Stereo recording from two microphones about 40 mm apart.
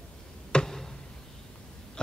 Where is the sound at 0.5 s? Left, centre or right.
Left.